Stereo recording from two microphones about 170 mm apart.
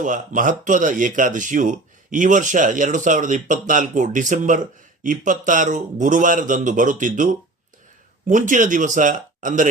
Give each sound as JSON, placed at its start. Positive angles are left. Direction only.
{"t": 0.0, "sound": "speech", "side_deg": -50}
{"t": 8.3, "sound": "speech", "side_deg": -50}